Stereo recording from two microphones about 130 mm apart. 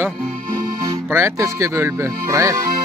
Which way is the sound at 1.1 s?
20° right (ahead or behind).